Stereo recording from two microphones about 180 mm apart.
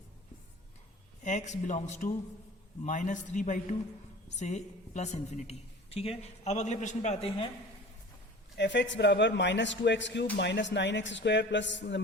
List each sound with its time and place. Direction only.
1.2 s a man's voice: 40° left (ahead or behind)
8.5 s a man's voice: 75° left (ahead or behind)